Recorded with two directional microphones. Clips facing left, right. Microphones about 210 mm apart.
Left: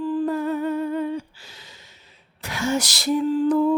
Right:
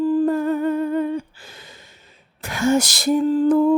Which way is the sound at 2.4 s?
50° right (ahead or behind).